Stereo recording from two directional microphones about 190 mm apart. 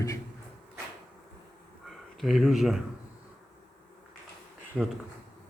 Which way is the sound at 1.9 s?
Centre (ahead or behind).